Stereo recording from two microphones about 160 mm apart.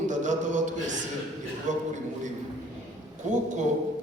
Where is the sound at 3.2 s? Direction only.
50° right (ahead or behind).